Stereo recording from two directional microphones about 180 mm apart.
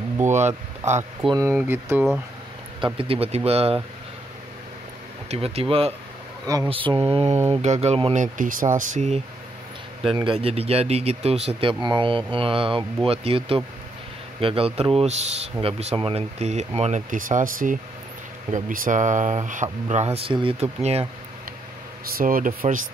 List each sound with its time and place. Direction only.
0.8 s speech: 40° right (ahead or behind)
1.5 s speech: 10° right (ahead or behind)
2.8 s speech: 30° right (ahead or behind)
5.3 s speech: 35° right (ahead or behind)
7.3 s speech: 15° right (ahead or behind)
7.6 s speech: 35° right (ahead or behind)
10.1 s speech: 30° right (ahead or behind)
22.1 s speech: 50° right (ahead or behind)